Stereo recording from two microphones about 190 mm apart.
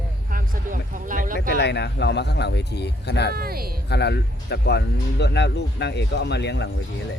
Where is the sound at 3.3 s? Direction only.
50° right (ahead or behind).